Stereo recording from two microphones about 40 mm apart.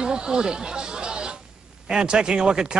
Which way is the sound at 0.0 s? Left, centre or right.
Centre.